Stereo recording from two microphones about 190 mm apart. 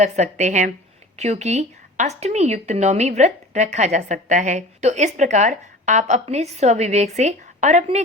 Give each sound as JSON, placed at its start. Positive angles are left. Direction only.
{"t": 0.0, "sound": "speech", "side_deg": -35}